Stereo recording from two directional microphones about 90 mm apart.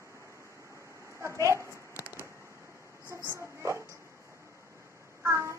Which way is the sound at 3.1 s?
30° right (ahead or behind).